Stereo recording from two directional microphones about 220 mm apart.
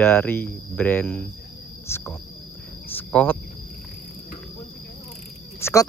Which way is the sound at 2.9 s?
5° left (ahead or behind).